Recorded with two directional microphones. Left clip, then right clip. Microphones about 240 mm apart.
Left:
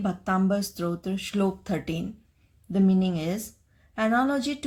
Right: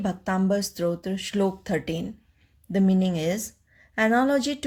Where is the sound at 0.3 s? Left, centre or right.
Right.